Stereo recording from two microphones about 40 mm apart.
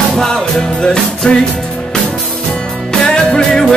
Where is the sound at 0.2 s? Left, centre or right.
Centre.